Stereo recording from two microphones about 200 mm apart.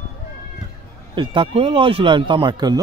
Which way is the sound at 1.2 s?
25° right (ahead or behind).